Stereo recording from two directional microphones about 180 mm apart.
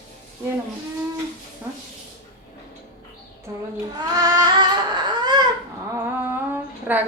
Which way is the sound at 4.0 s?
20° right (ahead or behind).